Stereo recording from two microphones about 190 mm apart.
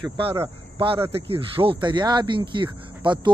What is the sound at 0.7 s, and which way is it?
Speech, 25° right (ahead or behind).